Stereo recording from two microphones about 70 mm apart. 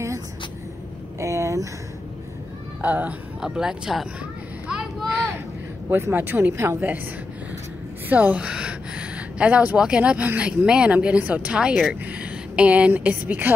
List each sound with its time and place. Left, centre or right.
1.2 s a sound: right
2.8 s speech: right
3.3 s speech: centre
5.9 s a woman's voice: right
6.5 s a woman's voice: right
8.1 s a woman's voice: right